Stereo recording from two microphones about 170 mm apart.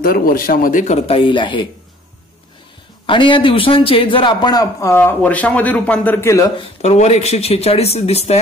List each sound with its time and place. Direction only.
0.0 s speech: 60° left (ahead or behind)
0.9 s a man's voice: 35° left (ahead or behind)
3.1 s a man's voice: 30° left (ahead or behind)
6.8 s speech: 40° left (ahead or behind)